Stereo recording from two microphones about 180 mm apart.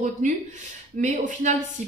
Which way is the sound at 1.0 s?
40° right (ahead or behind).